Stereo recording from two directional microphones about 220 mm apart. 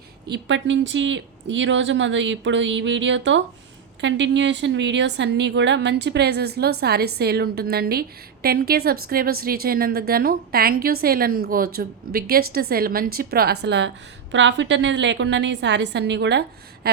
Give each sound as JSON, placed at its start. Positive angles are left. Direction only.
{"t": 0.3, "sound": "a woman's voice", "side_deg": -55}